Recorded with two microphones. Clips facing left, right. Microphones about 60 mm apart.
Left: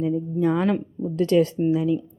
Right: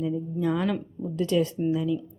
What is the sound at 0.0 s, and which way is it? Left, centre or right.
Speech, left.